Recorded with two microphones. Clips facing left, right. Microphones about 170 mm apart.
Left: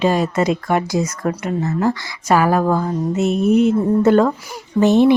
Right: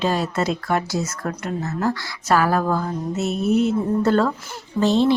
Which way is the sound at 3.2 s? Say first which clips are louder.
Left 5 dB; 50° left (ahead or behind).